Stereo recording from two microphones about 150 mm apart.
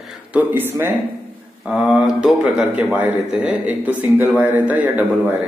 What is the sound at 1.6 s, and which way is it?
A man's voice, 5° right (ahead or behind).